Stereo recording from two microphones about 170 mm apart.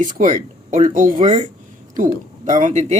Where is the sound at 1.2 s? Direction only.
30° right (ahead or behind).